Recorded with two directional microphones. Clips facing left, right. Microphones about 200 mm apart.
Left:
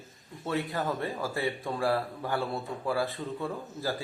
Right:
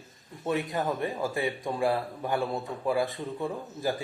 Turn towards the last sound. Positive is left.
turn(degrees=-15)  # may be behind; listen again after turning